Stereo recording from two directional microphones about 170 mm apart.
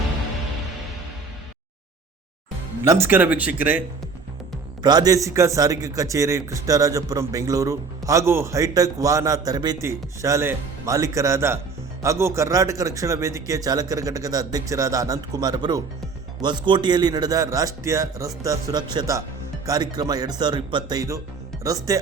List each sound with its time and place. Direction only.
2.8 s speech: 15° right (ahead or behind)
4.8 s a man's voice: 25° right (ahead or behind)